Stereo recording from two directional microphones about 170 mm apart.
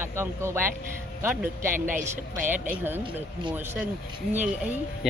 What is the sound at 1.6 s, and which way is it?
Speech, 55° right (ahead or behind).